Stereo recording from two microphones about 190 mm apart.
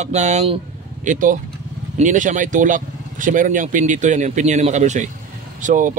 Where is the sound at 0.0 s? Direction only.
40° right (ahead or behind).